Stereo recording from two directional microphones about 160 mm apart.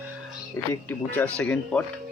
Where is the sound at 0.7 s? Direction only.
10° left (ahead or behind).